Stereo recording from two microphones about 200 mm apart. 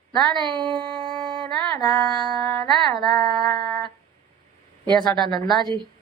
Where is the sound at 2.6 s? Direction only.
20° left (ahead or behind).